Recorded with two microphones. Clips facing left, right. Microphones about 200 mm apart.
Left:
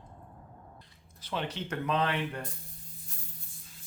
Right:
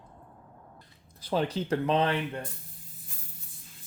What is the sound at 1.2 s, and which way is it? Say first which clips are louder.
Speech: right 7 dB; 35° right (ahead or behind).